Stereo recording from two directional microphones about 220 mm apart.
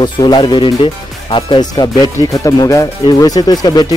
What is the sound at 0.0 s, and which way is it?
Speech, 20° left (ahead or behind).